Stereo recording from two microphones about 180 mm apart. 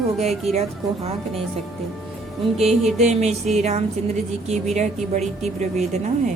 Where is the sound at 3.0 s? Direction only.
40° right (ahead or behind).